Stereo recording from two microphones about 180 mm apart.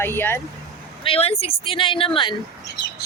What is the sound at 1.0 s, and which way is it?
A woman's voice, 30° left (ahead or behind).